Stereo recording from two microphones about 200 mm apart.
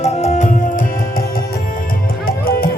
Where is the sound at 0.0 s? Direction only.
30° left (ahead or behind).